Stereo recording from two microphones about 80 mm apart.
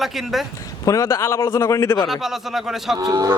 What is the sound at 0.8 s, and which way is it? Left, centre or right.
Speech, left.